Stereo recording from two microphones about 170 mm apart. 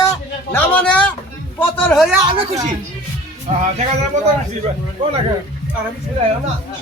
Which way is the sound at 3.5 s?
40° right (ahead or behind).